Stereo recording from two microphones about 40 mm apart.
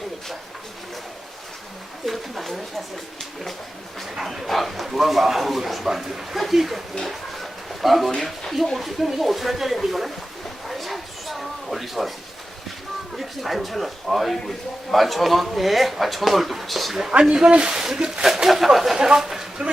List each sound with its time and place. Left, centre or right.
2.0 s speech: centre
4.1 s speech: centre
4.4 s speech: centre
7.1 s a sound: centre
8.1 s speech: centre
10.7 s a sound: centre
13.1 s speech: centre
17.1 s speech: right